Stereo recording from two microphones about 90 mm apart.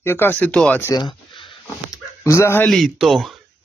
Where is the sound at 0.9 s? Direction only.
60° left (ahead or behind).